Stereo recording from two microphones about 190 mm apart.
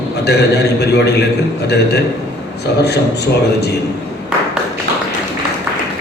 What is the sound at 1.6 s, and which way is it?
A man's voice, 60° left (ahead or behind).